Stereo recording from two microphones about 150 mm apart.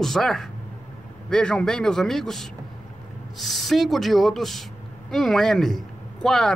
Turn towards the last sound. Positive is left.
turn(degrees=5)  # may be behind; listen again after turning